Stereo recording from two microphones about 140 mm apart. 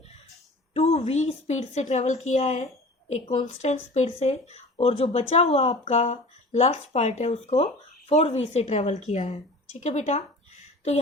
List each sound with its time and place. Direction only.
0.7 s speech: 50° left (ahead or behind)